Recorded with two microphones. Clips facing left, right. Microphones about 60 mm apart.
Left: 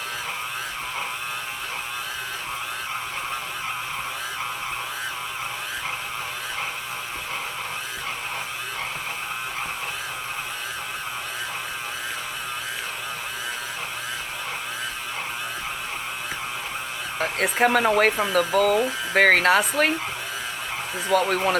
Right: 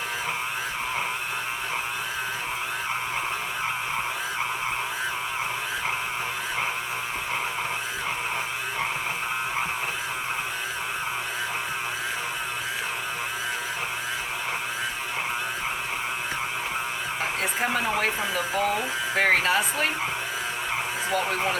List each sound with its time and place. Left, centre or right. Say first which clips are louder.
17.4 s speech: left 8 dB; left
21.1 s speech: left 6 dB; left